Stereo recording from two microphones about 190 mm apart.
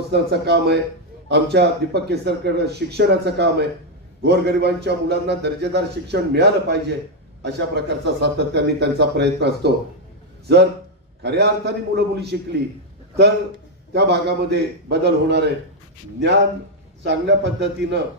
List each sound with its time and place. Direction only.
0.1 s speech: 60° right (ahead or behind)
13.9 s speech: 60° right (ahead or behind)
17.0 s a man's voice: 65° right (ahead or behind)